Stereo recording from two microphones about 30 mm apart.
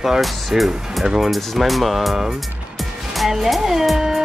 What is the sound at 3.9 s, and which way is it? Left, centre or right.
Music, centre.